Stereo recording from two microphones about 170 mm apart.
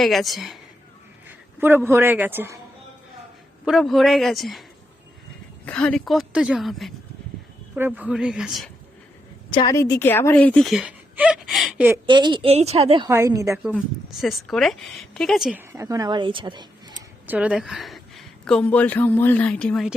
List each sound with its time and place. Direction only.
0.0 s a woman's voice: centre (ahead or behind)
1.5 s a man's voice: 15° right (ahead or behind)
3.7 s a woman's voice: centre (ahead or behind)
5.6 s a woman's voice: 5° left (ahead or behind)
9.5 s a woman's voice: 30° left (ahead or behind)
9.7 s speech: 15° left (ahead or behind); by 11.9 s centre (ahead or behind)
12.0 s a woman's voice: 25° right (ahead or behind)
13.1 s a man's voice: 15° right (ahead or behind)
13.7 s a woman's voice: centre (ahead or behind)
15.6 s speech: 15° right (ahead or behind)
17.2 s speech: 10° right (ahead or behind)